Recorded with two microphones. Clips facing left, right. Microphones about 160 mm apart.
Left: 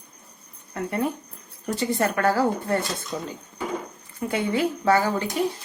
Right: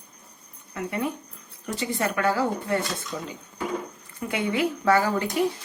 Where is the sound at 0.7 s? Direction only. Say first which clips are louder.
Left 2 dB; 40° left (ahead or behind).